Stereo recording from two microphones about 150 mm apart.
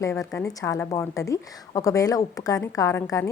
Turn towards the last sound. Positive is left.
turn(degrees=20)  # may be behind; listen again after turning